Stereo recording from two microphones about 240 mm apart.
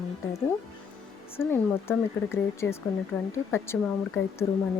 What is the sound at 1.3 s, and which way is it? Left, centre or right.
Speech, centre.